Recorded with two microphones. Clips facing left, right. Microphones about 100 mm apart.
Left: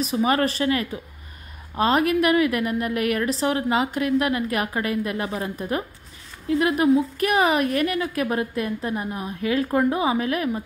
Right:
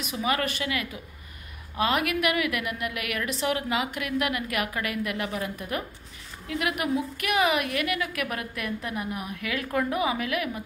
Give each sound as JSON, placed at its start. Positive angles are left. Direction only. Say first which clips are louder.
{"t": 0.0, "sound": "a woman's voice", "louder": "left 7 dB", "side_deg": 35}